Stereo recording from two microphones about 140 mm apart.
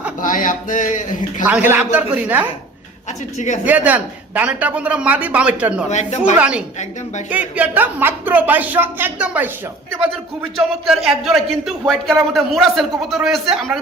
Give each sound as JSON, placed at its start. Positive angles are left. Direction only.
{"t": 0.2, "sound": "speech", "side_deg": 70}
{"t": 1.5, "sound": "speech", "side_deg": -10}
{"t": 3.3, "sound": "a woman's voice", "side_deg": 60}
{"t": 3.7, "sound": "speech", "side_deg": -10}
{"t": 5.9, "sound": "a woman's voice", "side_deg": 55}
{"t": 6.3, "sound": "speech", "side_deg": -10}
{"t": 10.6, "sound": "speech", "side_deg": 0}